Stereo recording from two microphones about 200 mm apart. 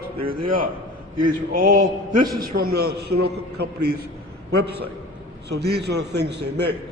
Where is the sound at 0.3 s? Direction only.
45° right (ahead or behind).